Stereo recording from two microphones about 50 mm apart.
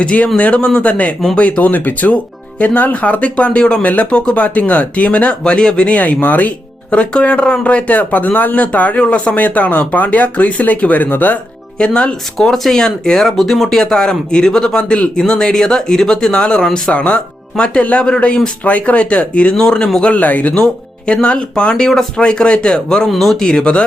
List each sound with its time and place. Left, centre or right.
0.0 s speech: left
5.4 s speech: centre
6.0 s speech: left
11.8 s speech: centre
12.5 s speech: centre
16.9 s speech: left
17.5 s speech: centre
18.6 s speech: left
19.6 s speech: centre
20.1 s speech: left
21.1 s speech: centre
23.5 s speech: left